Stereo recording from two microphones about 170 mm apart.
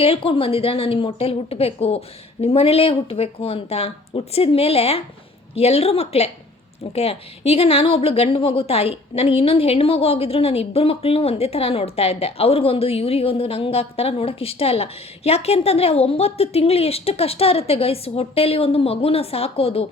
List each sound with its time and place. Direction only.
0.0 s a woman's voice: 35° left (ahead or behind)